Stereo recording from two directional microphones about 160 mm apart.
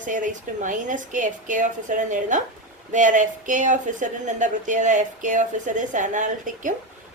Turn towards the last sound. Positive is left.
turn(degrees=-55)  # may be behind; listen again after turning